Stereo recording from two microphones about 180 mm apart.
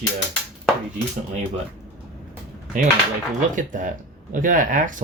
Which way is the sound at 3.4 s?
45° right (ahead or behind).